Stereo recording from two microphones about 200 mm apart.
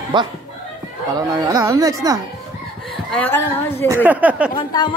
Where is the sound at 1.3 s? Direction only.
15° right (ahead or behind).